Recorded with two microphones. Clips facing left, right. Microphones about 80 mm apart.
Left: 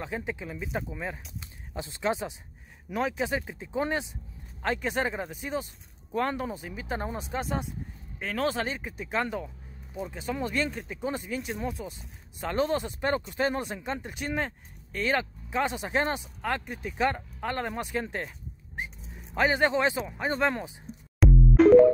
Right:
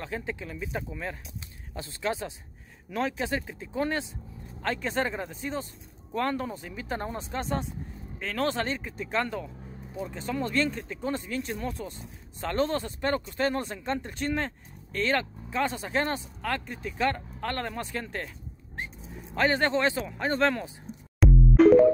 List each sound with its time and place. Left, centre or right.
0.0 s speech: centre
19.3 s speech: centre
21.2 s music: centre